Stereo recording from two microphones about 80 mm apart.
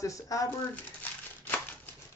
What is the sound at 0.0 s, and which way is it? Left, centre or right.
Speech, left.